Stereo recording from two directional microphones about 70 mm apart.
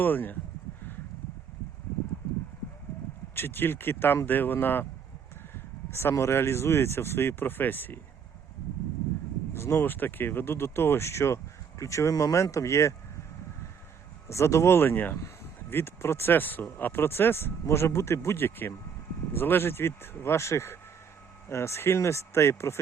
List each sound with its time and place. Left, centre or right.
0.0 s speech: left
3.3 s speech: left
5.9 s speech: left
9.5 s speech: left
14.3 s speech: left
14.8 s speech: left